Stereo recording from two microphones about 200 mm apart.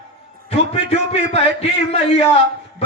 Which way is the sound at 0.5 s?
30° left (ahead or behind).